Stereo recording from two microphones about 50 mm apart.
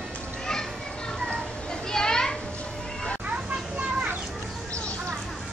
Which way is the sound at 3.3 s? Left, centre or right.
Right.